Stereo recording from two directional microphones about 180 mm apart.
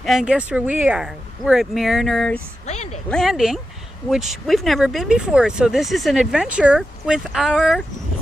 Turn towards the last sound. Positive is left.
turn(degrees=0)  # may be behind; listen again after turning